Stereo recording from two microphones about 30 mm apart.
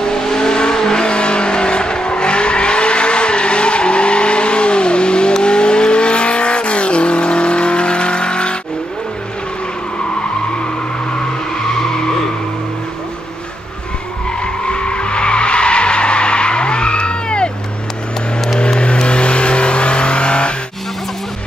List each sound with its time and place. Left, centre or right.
0.0 s vehicle: left
1.0 s vehicle: left
14.4 s skidding: left
18.6 s vehicle: left